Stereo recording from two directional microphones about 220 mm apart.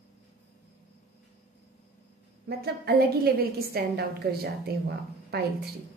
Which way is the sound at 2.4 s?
45° right (ahead or behind).